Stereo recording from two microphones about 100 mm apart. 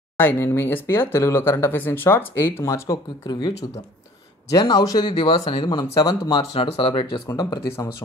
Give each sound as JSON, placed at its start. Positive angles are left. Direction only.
{"t": 0.2, "sound": "speech", "side_deg": 20}
{"t": 3.3, "sound": "speech", "side_deg": 45}
{"t": 4.6, "sound": "speech", "side_deg": 40}
{"t": 5.1, "sound": "speech", "side_deg": 60}
{"t": 6.5, "sound": "speech", "side_deg": 70}
{"t": 7.2, "sound": "speech", "side_deg": 35}